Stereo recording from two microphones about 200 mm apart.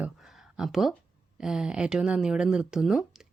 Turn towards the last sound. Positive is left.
turn(degrees=0)  # may be behind; listen again after turning